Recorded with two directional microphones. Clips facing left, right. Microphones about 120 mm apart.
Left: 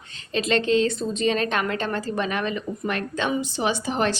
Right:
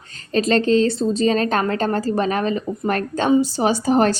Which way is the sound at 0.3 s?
40° right (ahead or behind).